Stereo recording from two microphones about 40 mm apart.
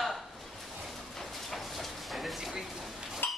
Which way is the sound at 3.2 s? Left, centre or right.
Left.